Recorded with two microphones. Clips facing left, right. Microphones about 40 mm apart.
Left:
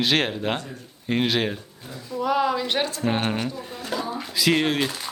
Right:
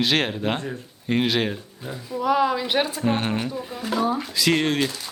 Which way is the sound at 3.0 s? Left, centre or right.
Centre.